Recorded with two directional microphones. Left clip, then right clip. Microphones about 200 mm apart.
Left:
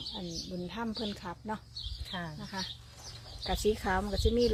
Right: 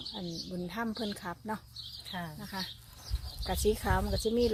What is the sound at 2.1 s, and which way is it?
Speech, centre (ahead or behind).